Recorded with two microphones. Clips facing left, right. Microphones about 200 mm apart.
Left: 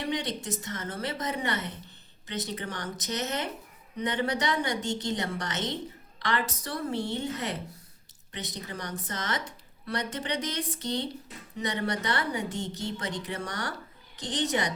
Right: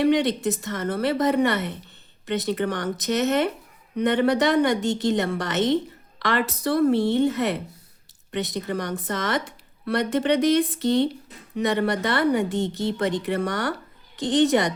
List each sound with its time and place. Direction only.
0.0 s a woman's voice: 65° right (ahead or behind)